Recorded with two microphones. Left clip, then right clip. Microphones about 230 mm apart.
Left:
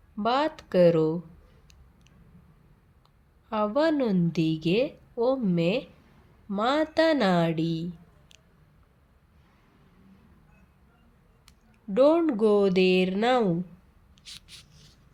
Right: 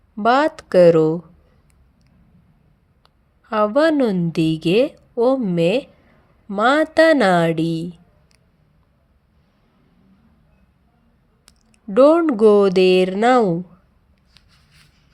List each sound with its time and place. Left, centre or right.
0.2 s a woman's voice: right
3.5 s a woman's voice: right
11.4 s speech: right